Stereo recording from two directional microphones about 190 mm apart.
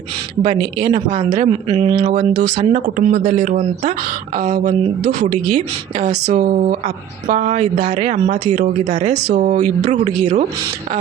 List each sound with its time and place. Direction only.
0.4 s a woman's voice: 30° right (ahead or behind)